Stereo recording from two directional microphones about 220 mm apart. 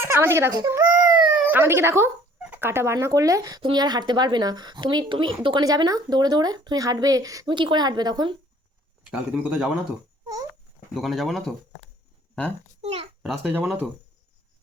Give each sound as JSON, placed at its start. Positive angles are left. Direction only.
{"t": 0.0, "sound": "speech", "side_deg": -10}
{"t": 9.0, "sound": "speech", "side_deg": -5}
{"t": 10.9, "sound": "speech", "side_deg": 0}
{"t": 12.8, "sound": "a child's voice", "side_deg": -30}
{"t": 13.2, "sound": "speech", "side_deg": 0}